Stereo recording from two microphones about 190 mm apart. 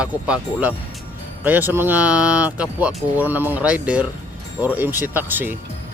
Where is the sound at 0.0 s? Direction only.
5° right (ahead or behind).